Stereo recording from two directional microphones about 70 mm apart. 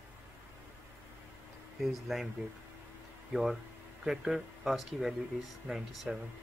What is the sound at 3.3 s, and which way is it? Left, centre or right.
Speech, centre.